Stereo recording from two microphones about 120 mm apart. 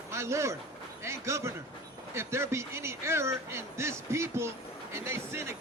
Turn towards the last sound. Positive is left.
turn(degrees=-20)  # may be behind; listen again after turning